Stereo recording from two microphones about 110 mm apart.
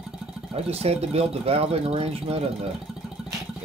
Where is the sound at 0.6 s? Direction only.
65° right (ahead or behind).